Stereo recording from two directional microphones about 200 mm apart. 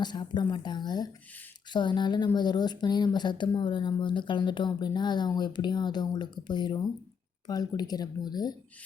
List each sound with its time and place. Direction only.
0.0 s a woman's voice: 20° left (ahead or behind)